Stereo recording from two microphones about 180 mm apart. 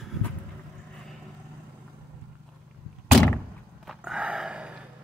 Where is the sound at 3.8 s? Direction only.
5° right (ahead or behind).